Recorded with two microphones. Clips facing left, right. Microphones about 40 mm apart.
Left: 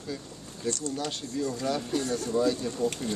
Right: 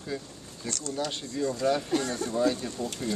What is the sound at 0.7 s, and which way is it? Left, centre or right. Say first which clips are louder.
Speech: left 4 dB; right.